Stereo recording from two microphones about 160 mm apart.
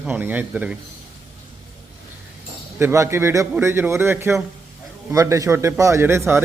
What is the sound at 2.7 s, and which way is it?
A man's voice, 15° right (ahead or behind).